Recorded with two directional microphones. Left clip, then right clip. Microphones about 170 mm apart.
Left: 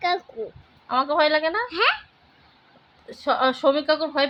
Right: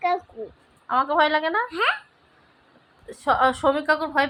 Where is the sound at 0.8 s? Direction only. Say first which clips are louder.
Even; 10° right (ahead or behind).